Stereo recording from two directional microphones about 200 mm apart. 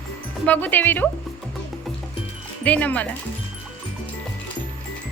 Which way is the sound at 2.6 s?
5° left (ahead or behind).